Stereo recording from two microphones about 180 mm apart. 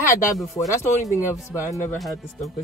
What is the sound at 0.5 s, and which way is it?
Speech, 15° left (ahead or behind).